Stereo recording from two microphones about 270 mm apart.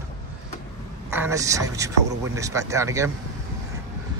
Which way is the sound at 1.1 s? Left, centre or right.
Centre.